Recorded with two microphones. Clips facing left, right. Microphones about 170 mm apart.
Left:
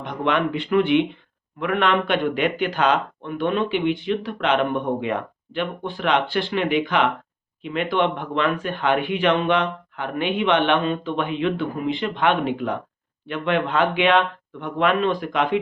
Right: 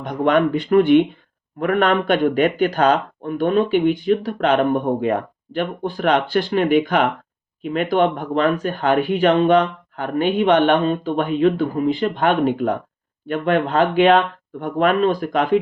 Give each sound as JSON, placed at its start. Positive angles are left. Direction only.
{"t": 0.0, "sound": "speech", "side_deg": -45}